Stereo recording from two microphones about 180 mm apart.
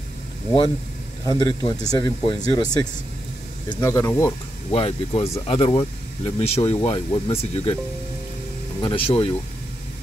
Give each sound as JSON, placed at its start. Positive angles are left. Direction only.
{"t": 1.2, "sound": "speech", "side_deg": 20}
{"t": 4.6, "sound": "speech", "side_deg": 30}
{"t": 8.8, "sound": "speech", "side_deg": 30}